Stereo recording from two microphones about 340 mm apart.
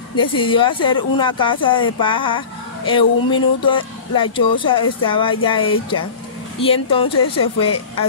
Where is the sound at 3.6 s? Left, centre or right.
Centre.